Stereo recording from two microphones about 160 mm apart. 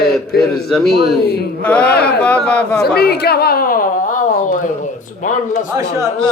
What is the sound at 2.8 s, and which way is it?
A woman's voice, 80° left.